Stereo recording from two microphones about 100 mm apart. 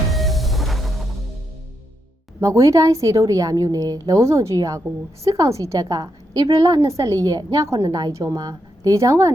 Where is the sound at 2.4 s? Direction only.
30° right (ahead or behind).